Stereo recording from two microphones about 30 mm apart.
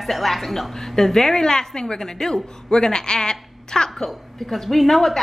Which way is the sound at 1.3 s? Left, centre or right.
Left.